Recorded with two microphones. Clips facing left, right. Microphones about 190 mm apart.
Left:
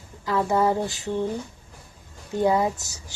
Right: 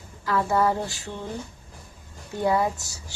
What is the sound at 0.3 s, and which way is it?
Speech, 20° left (ahead or behind).